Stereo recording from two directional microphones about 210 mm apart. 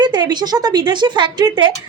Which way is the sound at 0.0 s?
20° right (ahead or behind).